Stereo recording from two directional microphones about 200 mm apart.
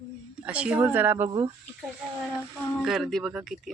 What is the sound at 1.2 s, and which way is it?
Speech, 30° right (ahead or behind).